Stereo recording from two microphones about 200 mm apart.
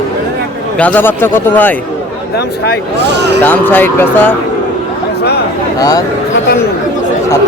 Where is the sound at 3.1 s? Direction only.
60° right (ahead or behind).